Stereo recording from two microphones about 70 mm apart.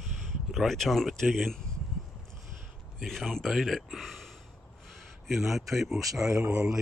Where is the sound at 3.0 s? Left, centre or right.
Centre.